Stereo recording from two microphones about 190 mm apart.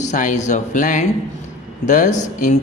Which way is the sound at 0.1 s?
40° left (ahead or behind).